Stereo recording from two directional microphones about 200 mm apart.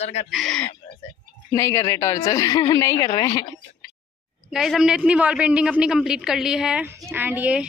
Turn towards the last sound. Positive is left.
turn(degrees=-5)  # may be behind; listen again after turning